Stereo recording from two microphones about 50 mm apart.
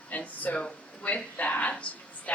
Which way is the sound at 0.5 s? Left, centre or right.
Left.